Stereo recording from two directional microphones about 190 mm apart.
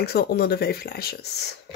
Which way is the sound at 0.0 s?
55° left (ahead or behind).